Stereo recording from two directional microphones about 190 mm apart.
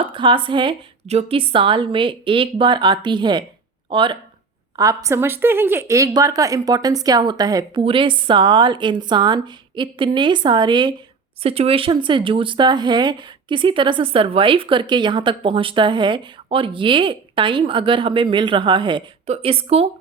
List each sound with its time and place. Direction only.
0.0 s speech: 25° right (ahead or behind)